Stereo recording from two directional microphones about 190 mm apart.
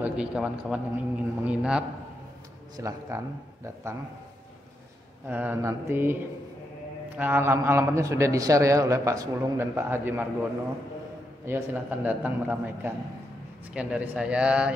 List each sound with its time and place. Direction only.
0.0 s a man's voice: 5° right (ahead or behind)
5.3 s a man's voice: 10° right (ahead or behind)
7.2 s a man's voice: 10° right (ahead or behind)
11.4 s a man's voice: 10° right (ahead or behind)